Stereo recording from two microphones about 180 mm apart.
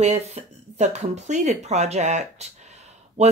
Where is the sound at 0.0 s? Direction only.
40° right (ahead or behind).